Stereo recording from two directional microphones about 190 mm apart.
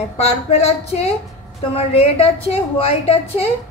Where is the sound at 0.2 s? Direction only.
35° left (ahead or behind).